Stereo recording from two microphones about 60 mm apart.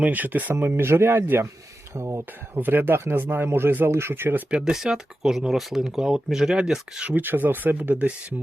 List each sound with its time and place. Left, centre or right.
0.0 s speech: right
0.6 s speech: right
2.6 s speech: right
4.5 s speech: centre
7.2 s speech: right